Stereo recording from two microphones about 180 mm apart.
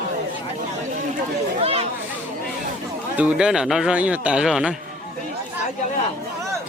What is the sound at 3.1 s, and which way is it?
Speech, 5° right (ahead or behind).